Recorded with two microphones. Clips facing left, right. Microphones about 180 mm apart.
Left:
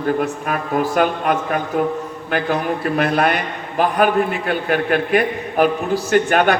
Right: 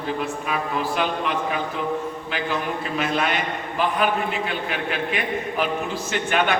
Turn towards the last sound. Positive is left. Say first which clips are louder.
# left 7 dB
turn(degrees=45)  # may be behind; listen again after turning